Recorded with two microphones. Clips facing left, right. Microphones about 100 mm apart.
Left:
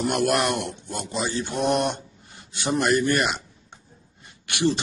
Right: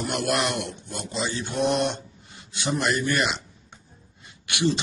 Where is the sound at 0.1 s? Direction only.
55° left (ahead or behind).